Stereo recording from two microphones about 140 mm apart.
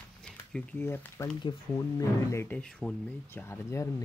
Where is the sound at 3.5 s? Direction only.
20° left (ahead or behind).